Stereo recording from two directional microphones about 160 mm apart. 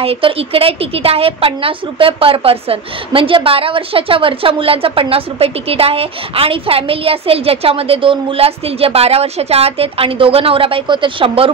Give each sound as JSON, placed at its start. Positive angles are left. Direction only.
{"t": 0.0, "sound": "a woman's voice", "side_deg": -35}